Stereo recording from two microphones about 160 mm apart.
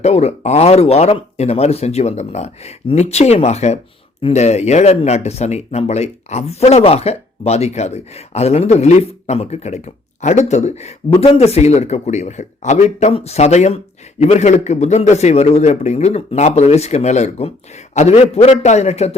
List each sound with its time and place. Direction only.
0.0 s speech: 40° left (ahead or behind)